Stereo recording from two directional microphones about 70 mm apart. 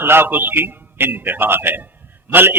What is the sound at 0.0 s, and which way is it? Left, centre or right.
A man's voice, right.